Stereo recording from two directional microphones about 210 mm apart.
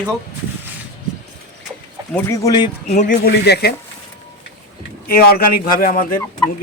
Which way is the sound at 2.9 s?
40° left (ahead or behind).